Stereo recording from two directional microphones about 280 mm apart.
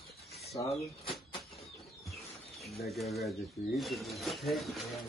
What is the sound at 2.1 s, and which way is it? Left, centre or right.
Bird, centre.